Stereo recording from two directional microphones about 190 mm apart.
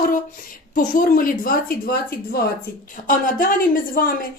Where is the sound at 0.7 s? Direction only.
45° left (ahead or behind).